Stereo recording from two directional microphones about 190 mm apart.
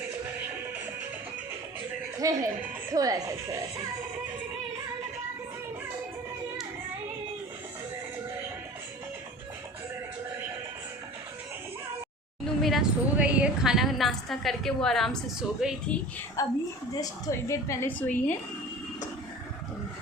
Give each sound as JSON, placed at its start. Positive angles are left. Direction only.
{"t": 2.1, "sound": "speech", "side_deg": -20}
{"t": 12.6, "sound": "a woman's voice", "side_deg": -5}
{"t": 16.4, "sound": "a woman's voice", "side_deg": 20}